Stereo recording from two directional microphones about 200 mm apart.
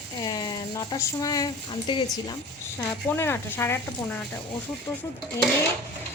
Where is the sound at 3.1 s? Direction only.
10° left (ahead or behind).